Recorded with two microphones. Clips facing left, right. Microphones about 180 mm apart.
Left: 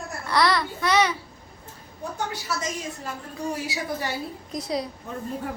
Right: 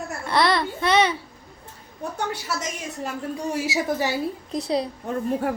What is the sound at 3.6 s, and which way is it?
Speech, 90° right.